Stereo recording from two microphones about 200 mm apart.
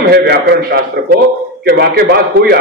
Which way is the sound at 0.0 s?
55° right (ahead or behind).